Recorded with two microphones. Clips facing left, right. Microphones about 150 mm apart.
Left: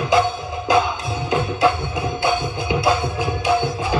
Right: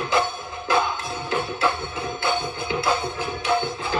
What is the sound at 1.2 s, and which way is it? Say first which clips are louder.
Music: left 6 dB; 15° left (ahead or behind).